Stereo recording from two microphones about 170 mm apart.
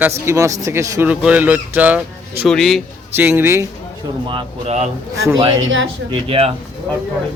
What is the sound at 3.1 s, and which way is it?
Speech, 10° right (ahead or behind).